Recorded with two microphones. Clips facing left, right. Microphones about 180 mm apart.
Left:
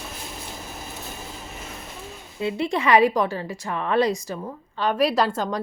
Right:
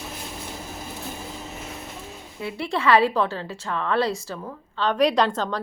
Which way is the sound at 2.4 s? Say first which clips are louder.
Left 2 dB; 20° left (ahead or behind).